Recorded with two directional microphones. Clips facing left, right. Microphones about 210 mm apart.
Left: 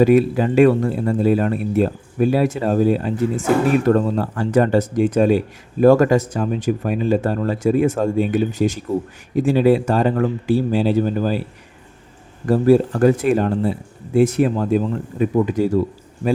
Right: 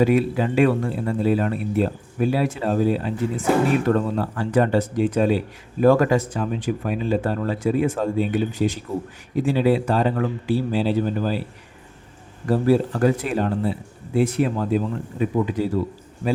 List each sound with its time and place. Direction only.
0.0 s speech: 45° left (ahead or behind)
12.5 s speech: 50° left (ahead or behind)